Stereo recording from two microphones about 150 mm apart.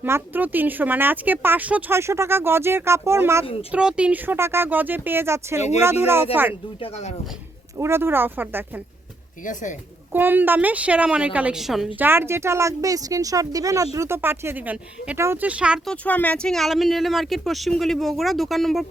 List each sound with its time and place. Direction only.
0.0 s speech: 10° right (ahead or behind)
3.4 s speech: 40° left (ahead or behind)
3.7 s speech: 5° right (ahead or behind)
6.7 s speech: 40° left (ahead or behind)
7.8 s speech: 15° right (ahead or behind)
9.4 s speech: 55° left (ahead or behind)
10.1 s speech: 10° right (ahead or behind)
11.9 s speech: 15° right (ahead or behind)
15.9 s speech: 10° left (ahead or behind)